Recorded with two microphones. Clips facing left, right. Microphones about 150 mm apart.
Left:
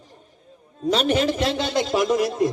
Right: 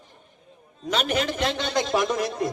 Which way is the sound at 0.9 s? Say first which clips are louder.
Left 5 dB; 30° left (ahead or behind).